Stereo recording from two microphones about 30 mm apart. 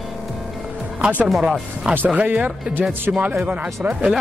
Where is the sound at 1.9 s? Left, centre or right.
Right.